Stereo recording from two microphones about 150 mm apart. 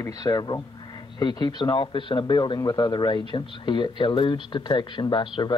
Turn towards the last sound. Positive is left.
turn(degrees=30)  # may be behind; listen again after turning